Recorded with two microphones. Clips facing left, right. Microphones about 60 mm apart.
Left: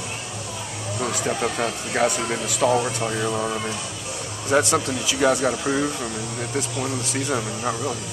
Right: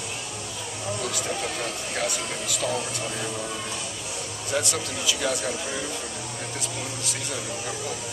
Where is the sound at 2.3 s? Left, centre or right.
Left.